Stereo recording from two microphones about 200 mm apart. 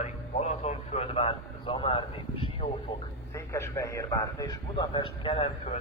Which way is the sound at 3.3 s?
15° left (ahead or behind).